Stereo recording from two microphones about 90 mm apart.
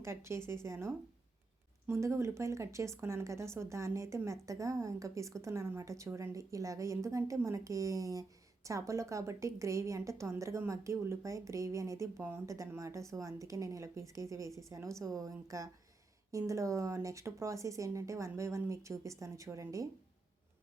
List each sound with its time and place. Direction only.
0.0 s speech: 30° right (ahead or behind)